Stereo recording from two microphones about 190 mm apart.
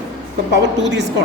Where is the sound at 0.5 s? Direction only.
65° right (ahead or behind).